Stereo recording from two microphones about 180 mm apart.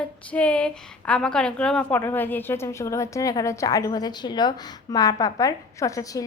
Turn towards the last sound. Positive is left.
turn(degrees=20)  # may be behind; listen again after turning